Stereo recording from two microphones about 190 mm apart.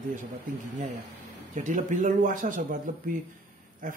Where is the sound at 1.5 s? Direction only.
40° right (ahead or behind).